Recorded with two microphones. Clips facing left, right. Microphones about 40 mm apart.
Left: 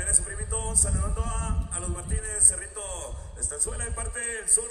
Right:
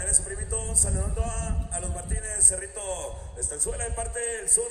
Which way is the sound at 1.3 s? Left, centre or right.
Left.